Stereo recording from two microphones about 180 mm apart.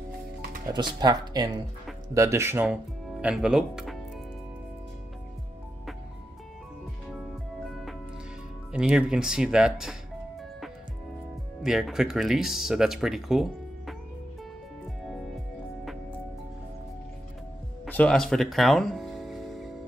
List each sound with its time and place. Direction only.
0.7 s speech: 25° right (ahead or behind); by 4.0 s centre (ahead or behind)
8.7 s speech: 5° right (ahead or behind)
11.6 s speech: centre (ahead or behind)
17.8 s music: 10° left (ahead or behind)